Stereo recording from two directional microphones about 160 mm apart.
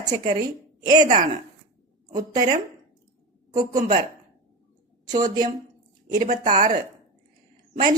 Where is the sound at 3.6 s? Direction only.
55° right (ahead or behind).